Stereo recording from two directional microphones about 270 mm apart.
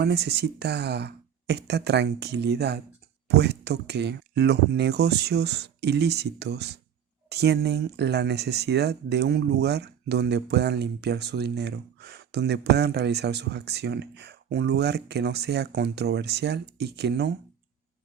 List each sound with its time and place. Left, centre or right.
0.0 s speech: right